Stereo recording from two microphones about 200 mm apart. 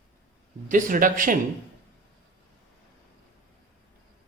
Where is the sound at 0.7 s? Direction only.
45° right (ahead or behind).